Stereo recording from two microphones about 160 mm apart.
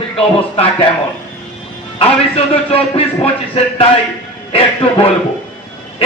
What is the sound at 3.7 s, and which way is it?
Speech, 35° left (ahead or behind).